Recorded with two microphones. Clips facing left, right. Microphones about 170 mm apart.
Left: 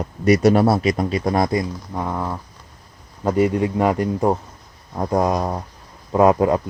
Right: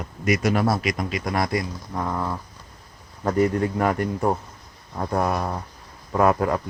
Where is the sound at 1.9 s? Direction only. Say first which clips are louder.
Left 1 dB; 10° left (ahead or behind).